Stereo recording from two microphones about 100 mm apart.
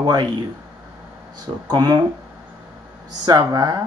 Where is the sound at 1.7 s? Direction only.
45° right (ahead or behind).